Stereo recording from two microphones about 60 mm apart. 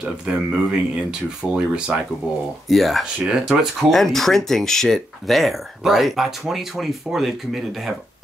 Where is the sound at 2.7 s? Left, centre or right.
Centre.